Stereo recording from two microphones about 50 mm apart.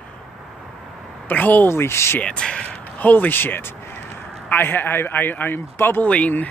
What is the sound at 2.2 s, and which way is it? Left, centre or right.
Speech, centre.